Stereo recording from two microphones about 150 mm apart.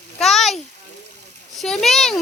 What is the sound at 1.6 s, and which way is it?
Speech, 5° left (ahead or behind).